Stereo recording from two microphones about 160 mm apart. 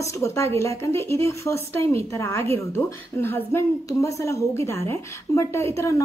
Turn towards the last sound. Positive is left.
turn(degrees=20)  # may be behind; listen again after turning